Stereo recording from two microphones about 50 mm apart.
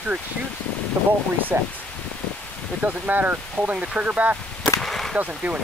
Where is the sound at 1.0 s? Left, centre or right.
Right.